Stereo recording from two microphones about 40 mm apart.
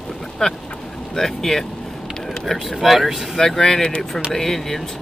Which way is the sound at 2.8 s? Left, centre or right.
Centre.